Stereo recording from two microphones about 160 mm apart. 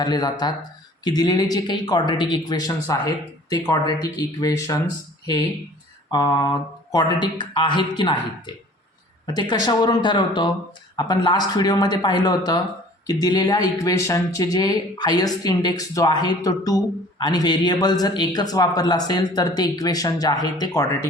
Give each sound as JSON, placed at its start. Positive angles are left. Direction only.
{"t": 0.0, "sound": "speech", "side_deg": 25}
{"t": 6.1, "sound": "speech", "side_deg": 20}